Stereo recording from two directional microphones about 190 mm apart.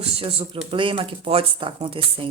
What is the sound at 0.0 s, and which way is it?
A woman's voice, 30° right (ahead or behind).